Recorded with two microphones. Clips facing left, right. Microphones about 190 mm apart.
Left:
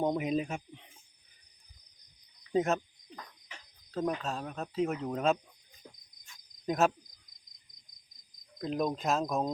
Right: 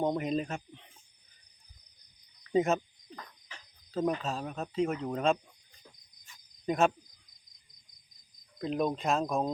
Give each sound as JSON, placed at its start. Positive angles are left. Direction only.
{"t": 0.0, "sound": "speech", "side_deg": 5}
{"t": 2.5, "sound": "insect", "side_deg": 0}
{"t": 3.9, "sound": "speech", "side_deg": 0}
{"t": 6.2, "sound": "insect", "side_deg": 0}
{"t": 8.5, "sound": "speech", "side_deg": 0}